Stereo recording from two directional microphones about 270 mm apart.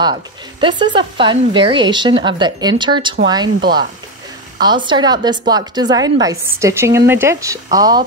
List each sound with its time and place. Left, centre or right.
0.0 s speech: centre